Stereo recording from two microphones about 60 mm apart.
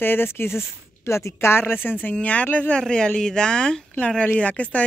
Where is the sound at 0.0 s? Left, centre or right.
Left.